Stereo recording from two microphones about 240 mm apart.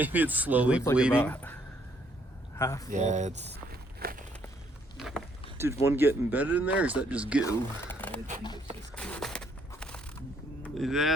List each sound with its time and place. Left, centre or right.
0.0 s speech: centre
1.2 s speech: centre
2.6 s speech: centre
2.9 s speech: right
3.5 s walk: right
4.9 s a sound: centre
6.0 s speech: centre
7.4 s speech: centre
9.0 s a sound: centre
10.6 s speech: centre